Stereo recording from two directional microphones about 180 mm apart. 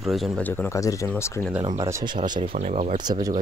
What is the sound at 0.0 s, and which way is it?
Speech, centre (ahead or behind).